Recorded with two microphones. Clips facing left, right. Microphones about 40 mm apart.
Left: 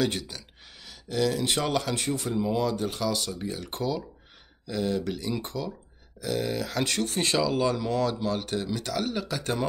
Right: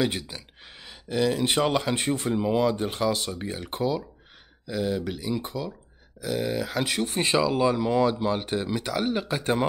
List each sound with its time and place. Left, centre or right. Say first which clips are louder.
0.0 s speech: right 1 dB; centre